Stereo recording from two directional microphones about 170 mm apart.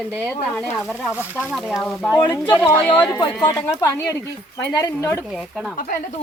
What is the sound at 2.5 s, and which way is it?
Speech, 10° left (ahead or behind).